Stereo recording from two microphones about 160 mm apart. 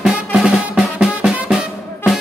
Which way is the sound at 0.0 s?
5° right (ahead or behind).